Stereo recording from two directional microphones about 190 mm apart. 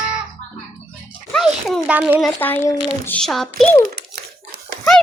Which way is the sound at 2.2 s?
10° left (ahead or behind).